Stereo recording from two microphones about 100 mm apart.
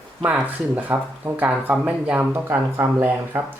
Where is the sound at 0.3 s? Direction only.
15° right (ahead or behind).